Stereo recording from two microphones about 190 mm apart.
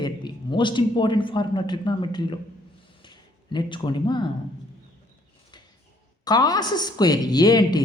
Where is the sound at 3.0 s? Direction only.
25° left (ahead or behind).